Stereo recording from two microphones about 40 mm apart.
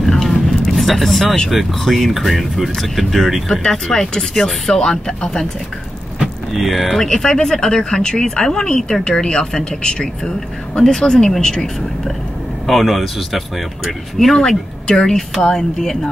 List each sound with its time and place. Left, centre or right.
0.0 s vehicle: centre
1.2 s speech: centre
1.5 s speech: centre
3.6 s speech: centre
6.2 s speech: centre
7.1 s speech: centre
12.6 s speech: centre
15.4 s speech: centre